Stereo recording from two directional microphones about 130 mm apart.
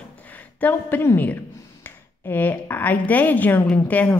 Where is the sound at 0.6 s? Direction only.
15° left (ahead or behind).